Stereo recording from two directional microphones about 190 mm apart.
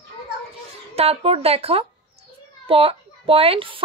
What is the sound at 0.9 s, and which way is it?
A woman's voice, 30° right (ahead or behind).